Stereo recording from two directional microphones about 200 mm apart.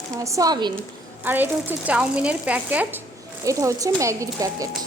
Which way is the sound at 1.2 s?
10° right (ahead or behind).